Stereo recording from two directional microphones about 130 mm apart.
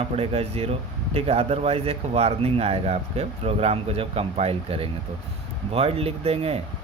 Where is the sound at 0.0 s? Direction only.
50° right (ahead or behind).